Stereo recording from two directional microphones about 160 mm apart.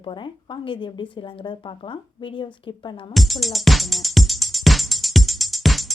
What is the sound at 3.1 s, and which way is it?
Music, centre (ahead or behind).